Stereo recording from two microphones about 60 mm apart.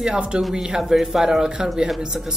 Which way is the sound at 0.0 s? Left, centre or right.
Centre.